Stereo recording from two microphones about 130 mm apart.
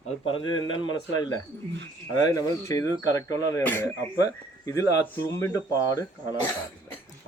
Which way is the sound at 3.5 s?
15° left (ahead or behind).